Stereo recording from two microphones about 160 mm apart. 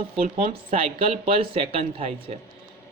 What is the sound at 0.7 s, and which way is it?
A man's voice, 35° right (ahead or behind).